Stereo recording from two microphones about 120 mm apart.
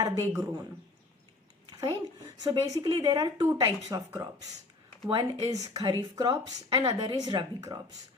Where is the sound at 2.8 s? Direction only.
45° right (ahead or behind).